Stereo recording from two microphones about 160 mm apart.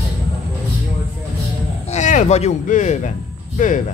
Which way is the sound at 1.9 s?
50° left (ahead or behind).